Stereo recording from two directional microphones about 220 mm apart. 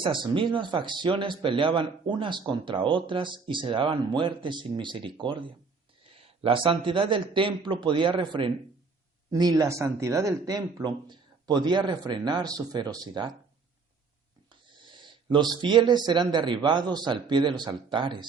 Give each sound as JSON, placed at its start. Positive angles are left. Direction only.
{"t": 0.0, "sound": "speech", "side_deg": -20}
{"t": 14.5, "sound": "a sound", "side_deg": -20}
{"t": 15.6, "sound": "speech", "side_deg": -20}